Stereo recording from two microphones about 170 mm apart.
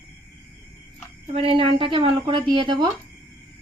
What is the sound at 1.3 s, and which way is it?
Speech, 35° right (ahead or behind).